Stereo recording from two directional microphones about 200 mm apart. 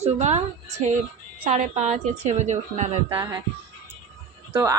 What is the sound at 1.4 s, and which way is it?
A woman's voice, 35° right (ahead or behind).